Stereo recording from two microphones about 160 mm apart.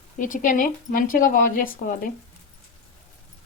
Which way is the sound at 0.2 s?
55° left (ahead or behind).